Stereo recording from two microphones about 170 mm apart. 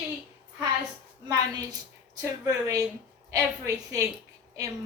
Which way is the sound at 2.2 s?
20° right (ahead or behind).